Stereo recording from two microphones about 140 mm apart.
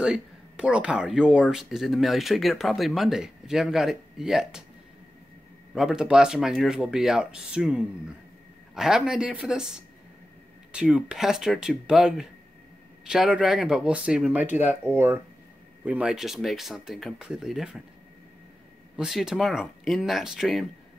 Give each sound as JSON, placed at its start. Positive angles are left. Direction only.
{"t": 0.0, "sound": "speech", "side_deg": -5}
{"t": 5.8, "sound": "speech", "side_deg": -5}
{"t": 18.9, "sound": "speech", "side_deg": -5}